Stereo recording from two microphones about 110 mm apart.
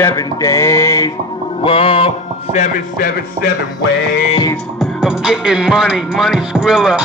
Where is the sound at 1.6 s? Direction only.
55° left (ahead or behind).